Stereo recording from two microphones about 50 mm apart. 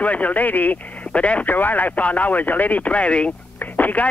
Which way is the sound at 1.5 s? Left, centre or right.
Left.